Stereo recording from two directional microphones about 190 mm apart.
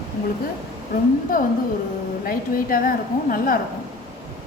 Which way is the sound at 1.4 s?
45° left (ahead or behind).